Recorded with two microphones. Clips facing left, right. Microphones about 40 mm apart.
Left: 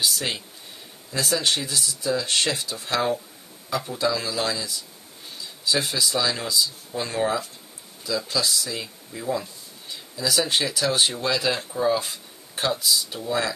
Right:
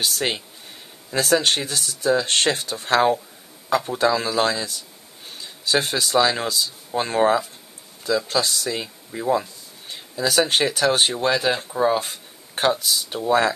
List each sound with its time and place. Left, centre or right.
0.0 s speech: right
12.0 s speech: right